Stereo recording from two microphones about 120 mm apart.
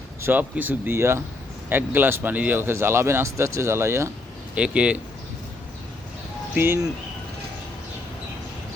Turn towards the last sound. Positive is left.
turn(degrees=-20)  # may be behind; listen again after turning